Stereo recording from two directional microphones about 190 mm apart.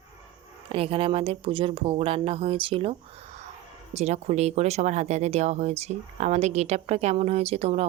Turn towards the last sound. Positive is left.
turn(degrees=-30)  # may be behind; listen again after turning